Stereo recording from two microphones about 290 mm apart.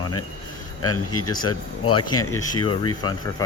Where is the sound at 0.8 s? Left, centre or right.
Left.